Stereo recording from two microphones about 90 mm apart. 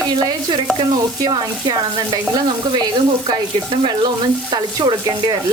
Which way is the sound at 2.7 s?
55° right (ahead or behind).